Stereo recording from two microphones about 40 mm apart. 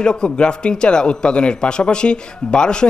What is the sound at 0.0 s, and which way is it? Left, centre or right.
A man's voice, left.